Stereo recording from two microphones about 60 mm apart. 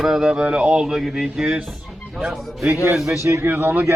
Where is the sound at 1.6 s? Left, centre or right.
Centre.